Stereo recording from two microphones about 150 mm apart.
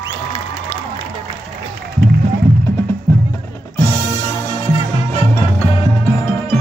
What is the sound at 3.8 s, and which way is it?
Music, 20° left (ahead or behind).